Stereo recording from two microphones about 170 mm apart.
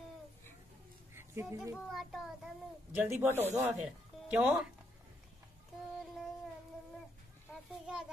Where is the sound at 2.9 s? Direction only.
10° right (ahead or behind).